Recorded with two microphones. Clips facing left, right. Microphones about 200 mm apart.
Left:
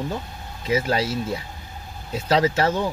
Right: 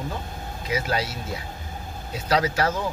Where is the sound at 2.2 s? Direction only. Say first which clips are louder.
Left 3 dB; 25° left (ahead or behind).